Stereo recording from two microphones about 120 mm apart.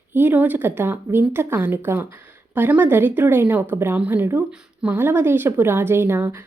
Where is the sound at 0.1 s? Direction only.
15° right (ahead or behind).